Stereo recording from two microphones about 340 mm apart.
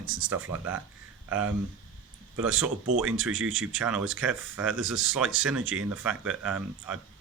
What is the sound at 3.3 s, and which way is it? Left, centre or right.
Speech, right.